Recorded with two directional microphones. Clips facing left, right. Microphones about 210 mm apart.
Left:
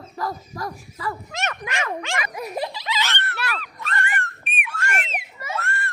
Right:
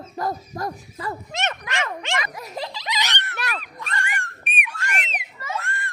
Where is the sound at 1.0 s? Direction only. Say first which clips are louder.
Even; 20° right (ahead or behind).